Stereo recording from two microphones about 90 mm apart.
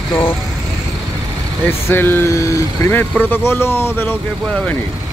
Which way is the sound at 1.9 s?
25° left (ahead or behind).